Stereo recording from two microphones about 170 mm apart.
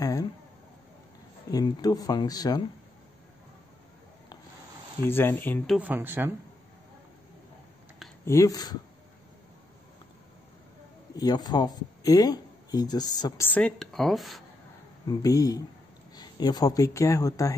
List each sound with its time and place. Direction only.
1.5 s speech: 25° left (ahead or behind)
5.0 s speech: 10° left (ahead or behind)
5.8 s speech: 10° right (ahead or behind)
8.3 s speech: 20° left (ahead or behind)
11.1 s speech: 25° left (ahead or behind)
13.5 s speech: 5° left (ahead or behind)
15.0 s speech: 20° left (ahead or behind)